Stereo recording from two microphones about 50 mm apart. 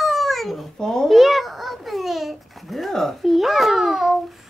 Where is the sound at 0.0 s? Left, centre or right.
Centre.